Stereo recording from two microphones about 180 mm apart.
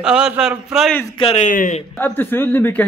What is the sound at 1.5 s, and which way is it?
Speech, 45° left (ahead or behind).